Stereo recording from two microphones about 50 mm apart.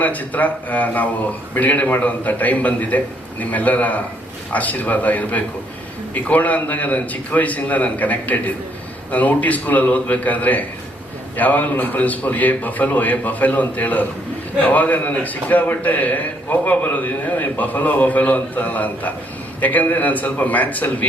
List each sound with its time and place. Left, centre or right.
0.0 s a man's voice: left